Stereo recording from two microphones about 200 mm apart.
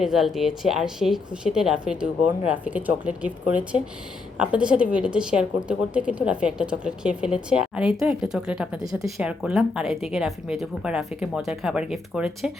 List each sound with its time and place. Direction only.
0.0 s a woman's voice: centre (ahead or behind)